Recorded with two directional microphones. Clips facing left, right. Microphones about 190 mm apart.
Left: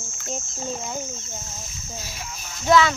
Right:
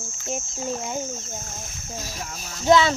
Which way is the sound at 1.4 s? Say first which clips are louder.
Right 2 dB; 50° right (ahead or behind).